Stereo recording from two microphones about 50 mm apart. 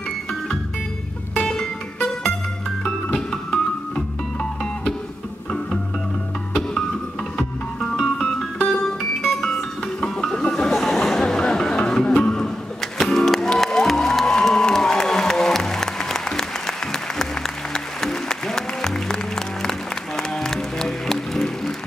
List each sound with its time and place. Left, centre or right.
1.3 s music: centre
7.3 s music: centre